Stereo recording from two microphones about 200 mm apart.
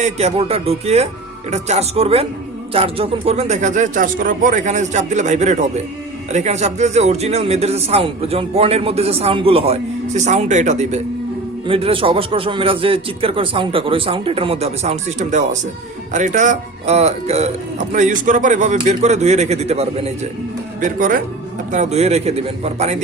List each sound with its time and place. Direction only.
0.0 s a man's voice: 30° right (ahead or behind)
21.7 s a man's voice: 35° right (ahead or behind)